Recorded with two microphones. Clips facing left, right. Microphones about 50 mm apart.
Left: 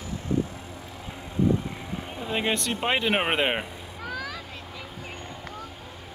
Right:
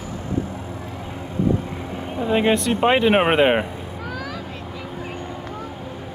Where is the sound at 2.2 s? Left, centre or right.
Centre.